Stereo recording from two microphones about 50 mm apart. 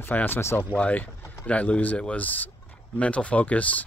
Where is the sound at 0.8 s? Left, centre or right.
Left.